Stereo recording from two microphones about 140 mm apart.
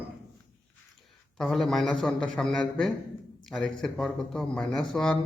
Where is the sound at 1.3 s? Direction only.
Centre (ahead or behind).